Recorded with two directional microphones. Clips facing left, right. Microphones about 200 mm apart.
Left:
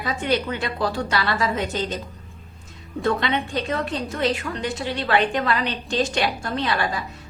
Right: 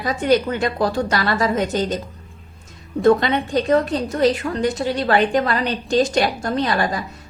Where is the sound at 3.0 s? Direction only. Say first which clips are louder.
Right 7 dB; 40° right (ahead or behind).